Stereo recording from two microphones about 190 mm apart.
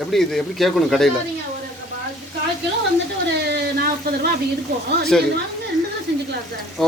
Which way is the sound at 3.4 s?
55° right (ahead or behind).